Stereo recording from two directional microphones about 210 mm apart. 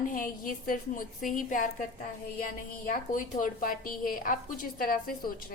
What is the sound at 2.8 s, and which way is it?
A woman's voice, 40° left (ahead or behind).